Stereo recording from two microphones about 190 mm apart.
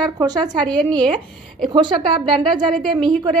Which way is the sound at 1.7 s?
25° right (ahead or behind).